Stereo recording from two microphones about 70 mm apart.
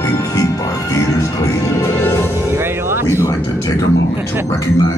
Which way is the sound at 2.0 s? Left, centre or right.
Left.